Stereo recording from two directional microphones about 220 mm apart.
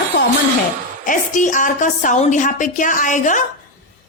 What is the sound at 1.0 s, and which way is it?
A woman's voice, 35° left (ahead or behind).